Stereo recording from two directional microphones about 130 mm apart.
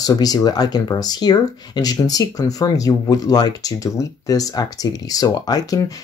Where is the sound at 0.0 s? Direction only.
30° left (ahead or behind).